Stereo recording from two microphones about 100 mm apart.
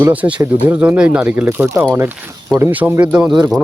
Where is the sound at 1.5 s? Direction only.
25° right (ahead or behind).